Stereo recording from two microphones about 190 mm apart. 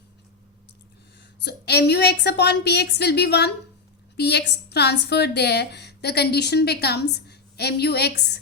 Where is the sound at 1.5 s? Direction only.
60° left (ahead or behind).